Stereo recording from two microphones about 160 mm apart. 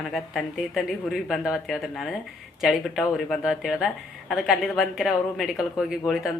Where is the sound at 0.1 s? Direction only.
Centre (ahead or behind).